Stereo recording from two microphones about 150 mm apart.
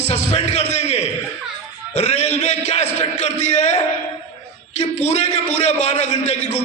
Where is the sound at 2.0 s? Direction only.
45° left (ahead or behind).